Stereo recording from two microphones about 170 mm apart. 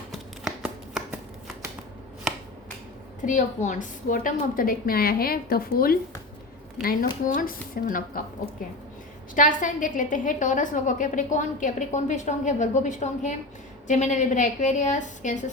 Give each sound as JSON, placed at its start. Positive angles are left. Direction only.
{"t": 0.1, "sound": "shuffling cards", "side_deg": 0}
{"t": 3.2, "sound": "a woman's voice", "side_deg": 45}
{"t": 9.3, "sound": "a woman's voice", "side_deg": 50}